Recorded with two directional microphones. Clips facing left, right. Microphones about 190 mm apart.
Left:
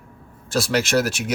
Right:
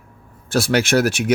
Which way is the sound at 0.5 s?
60° right (ahead or behind).